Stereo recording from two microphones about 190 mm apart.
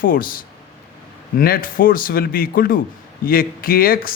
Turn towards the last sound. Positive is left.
turn(degrees=50)  # may be behind; listen again after turning